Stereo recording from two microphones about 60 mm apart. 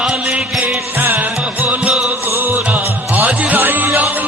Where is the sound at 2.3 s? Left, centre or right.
Right.